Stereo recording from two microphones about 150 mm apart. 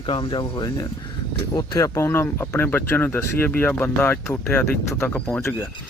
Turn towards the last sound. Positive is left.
turn(degrees=15)  # may be behind; listen again after turning